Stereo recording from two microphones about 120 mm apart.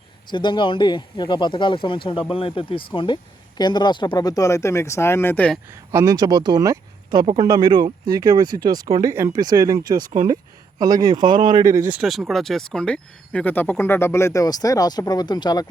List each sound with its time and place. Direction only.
0.3 s speech: 40° left (ahead or behind); by 5.5 s 15° left (ahead or behind)
5.6 s speech: 25° right (ahead or behind)
12.0 s speech: centre (ahead or behind); by 15.6 s 35° left (ahead or behind)